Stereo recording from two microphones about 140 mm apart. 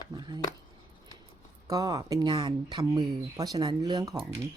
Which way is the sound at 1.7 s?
25° right (ahead or behind).